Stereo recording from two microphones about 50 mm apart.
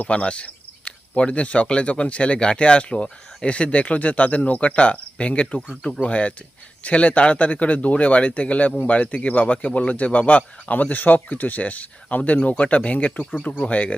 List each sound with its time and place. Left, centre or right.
0.0 s speech: left